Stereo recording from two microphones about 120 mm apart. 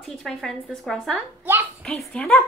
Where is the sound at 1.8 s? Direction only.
10° left (ahead or behind).